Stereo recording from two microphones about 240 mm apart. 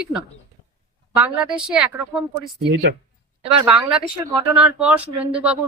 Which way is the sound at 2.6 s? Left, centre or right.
Right.